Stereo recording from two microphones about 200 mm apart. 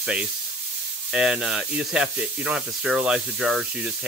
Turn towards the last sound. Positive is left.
turn(degrees=-5)  # may be behind; listen again after turning